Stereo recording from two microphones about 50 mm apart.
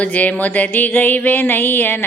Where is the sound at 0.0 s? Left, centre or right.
Left.